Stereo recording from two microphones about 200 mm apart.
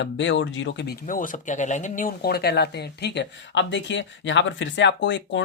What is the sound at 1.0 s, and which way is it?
Speech, 40° left (ahead or behind).